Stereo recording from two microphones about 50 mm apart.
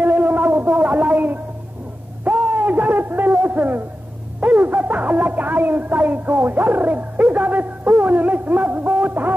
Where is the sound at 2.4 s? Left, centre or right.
Right.